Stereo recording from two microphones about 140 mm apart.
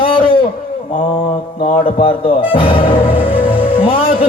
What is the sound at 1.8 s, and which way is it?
A man's voice, 40° left (ahead or behind).